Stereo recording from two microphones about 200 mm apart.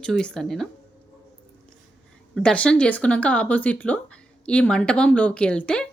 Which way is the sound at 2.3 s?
5° left (ahead or behind).